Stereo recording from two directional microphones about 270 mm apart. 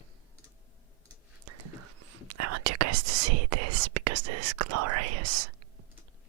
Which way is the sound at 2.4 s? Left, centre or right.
Right.